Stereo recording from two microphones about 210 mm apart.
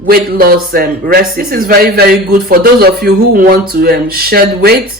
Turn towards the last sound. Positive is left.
turn(degrees=-45)  # may be behind; listen again after turning